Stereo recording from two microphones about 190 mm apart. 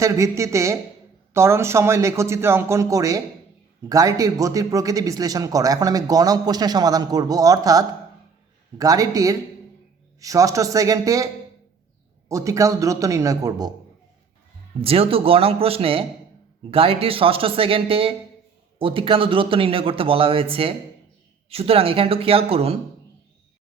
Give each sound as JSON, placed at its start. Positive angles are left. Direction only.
{"t": 0.0, "sound": "speech", "side_deg": -15}
{"t": 12.3, "sound": "speech", "side_deg": -15}
{"t": 14.8, "sound": "speech", "side_deg": -30}